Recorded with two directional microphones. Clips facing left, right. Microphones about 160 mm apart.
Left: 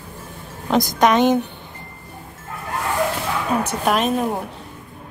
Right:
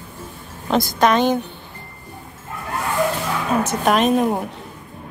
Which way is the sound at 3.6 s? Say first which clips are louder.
Right 2 dB; centre (ahead or behind).